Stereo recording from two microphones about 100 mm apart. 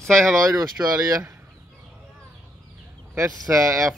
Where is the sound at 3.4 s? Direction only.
30° right (ahead or behind).